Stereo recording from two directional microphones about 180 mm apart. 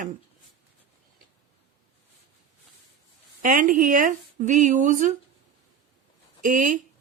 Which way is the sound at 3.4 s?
50° right (ahead or behind).